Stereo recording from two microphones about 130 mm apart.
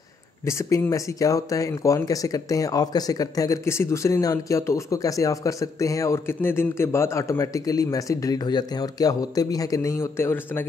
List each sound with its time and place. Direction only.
0.5 s speech: 20° left (ahead or behind)